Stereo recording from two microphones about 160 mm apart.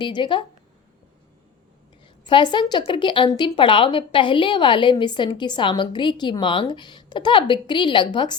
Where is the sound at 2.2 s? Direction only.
30° left (ahead or behind).